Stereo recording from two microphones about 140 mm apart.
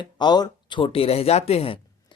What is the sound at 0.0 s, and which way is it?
Speech, 30° left (ahead or behind).